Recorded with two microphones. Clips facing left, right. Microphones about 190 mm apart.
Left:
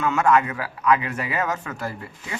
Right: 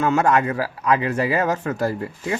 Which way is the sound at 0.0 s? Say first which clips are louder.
Right 2 dB; 35° right (ahead or behind).